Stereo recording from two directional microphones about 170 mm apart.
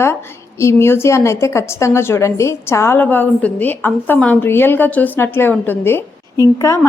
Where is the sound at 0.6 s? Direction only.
15° left (ahead or behind).